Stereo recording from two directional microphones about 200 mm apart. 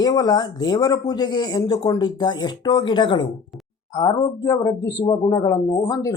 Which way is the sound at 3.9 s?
20° left (ahead or behind).